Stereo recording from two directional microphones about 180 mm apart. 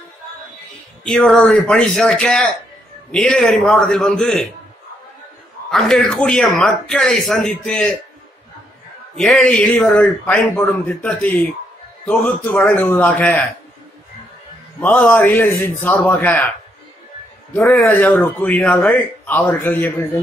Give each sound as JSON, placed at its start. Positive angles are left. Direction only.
{"t": 1.0, "sound": "speech", "side_deg": 0}
{"t": 5.7, "sound": "speech", "side_deg": 0}
{"t": 9.1, "sound": "speech", "side_deg": 5}
{"t": 14.8, "sound": "speech", "side_deg": 10}
{"t": 17.5, "sound": "speech", "side_deg": 10}